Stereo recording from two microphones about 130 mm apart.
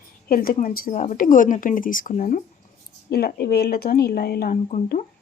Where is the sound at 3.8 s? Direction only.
90° left.